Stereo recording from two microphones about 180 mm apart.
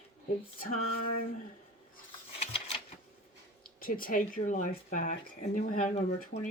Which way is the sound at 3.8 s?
50° left (ahead or behind).